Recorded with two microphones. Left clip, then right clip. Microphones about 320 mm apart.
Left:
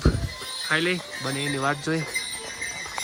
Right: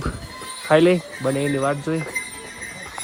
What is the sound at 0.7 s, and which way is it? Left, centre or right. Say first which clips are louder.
Speech: right 9 dB; centre.